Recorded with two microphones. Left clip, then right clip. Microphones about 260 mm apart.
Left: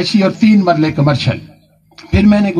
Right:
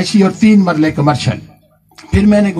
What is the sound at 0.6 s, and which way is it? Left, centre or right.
Speech, right.